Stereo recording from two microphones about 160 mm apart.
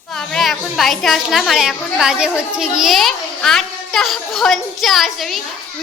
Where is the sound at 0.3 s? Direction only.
Centre (ahead or behind).